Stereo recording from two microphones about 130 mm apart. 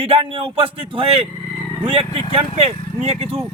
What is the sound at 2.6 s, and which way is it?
Speech, 50° right (ahead or behind).